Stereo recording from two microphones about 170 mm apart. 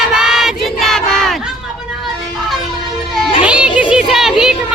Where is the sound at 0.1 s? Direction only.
5° right (ahead or behind).